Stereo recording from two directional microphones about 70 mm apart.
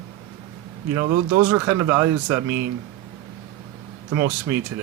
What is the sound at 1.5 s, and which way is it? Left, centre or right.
Speech, right.